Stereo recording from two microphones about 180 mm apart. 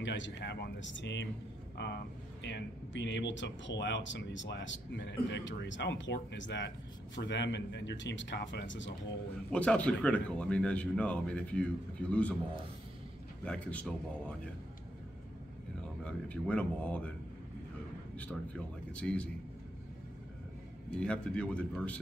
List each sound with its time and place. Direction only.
0.0 s speech: 90° left
2.4 s speech: 80° left
9.5 s speech: 5° left (ahead or behind)
13.5 s speech: 5° left (ahead or behind)
16.0 s speech: 5° left (ahead or behind)
18.1 s speech: 5° left (ahead or behind)
21.0 s speech: 5° left (ahead or behind)